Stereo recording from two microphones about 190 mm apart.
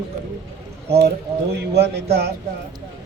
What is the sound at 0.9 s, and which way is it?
Speech, 60° right (ahead or behind).